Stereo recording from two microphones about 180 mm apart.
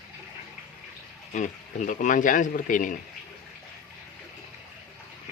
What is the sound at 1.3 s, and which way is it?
Speech, 45° left (ahead or behind).